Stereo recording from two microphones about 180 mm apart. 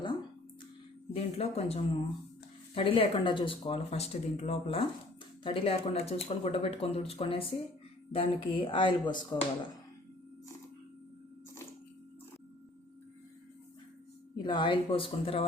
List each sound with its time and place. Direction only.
1.1 s speech: 35° left (ahead or behind)
14.3 s speech: 25° left (ahead or behind)